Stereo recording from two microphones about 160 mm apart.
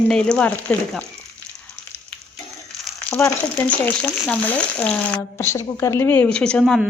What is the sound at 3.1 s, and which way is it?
Speech, 10° left (ahead or behind).